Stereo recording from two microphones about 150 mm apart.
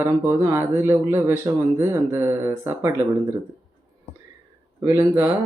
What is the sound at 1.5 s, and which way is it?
Speech, 25° right (ahead or behind).